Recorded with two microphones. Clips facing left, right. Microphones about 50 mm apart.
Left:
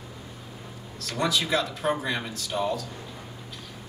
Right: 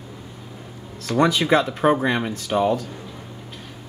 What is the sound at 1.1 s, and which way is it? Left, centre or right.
Speech, right.